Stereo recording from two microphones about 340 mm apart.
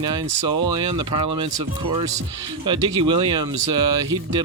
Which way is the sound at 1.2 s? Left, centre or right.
Right.